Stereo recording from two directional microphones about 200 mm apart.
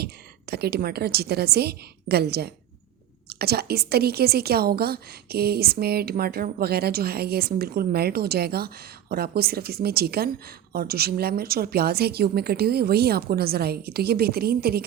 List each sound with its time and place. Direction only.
0.5 s a woman's voice: 55° right (ahead or behind)